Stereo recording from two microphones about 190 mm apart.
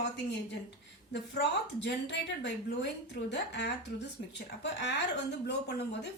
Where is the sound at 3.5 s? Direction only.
65° left (ahead or behind).